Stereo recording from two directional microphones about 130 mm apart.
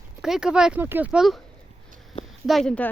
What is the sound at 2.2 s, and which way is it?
Speech, centre (ahead or behind).